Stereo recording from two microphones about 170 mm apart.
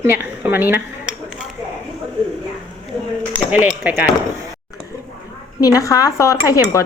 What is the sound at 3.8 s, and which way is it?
Speech, 10° right (ahead or behind).